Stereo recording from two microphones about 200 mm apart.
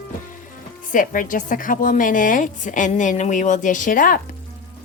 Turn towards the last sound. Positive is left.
turn(degrees=45)  # may be behind; listen again after turning